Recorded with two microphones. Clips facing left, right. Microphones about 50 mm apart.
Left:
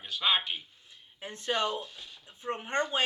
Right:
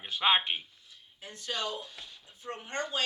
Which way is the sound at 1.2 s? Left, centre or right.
Left.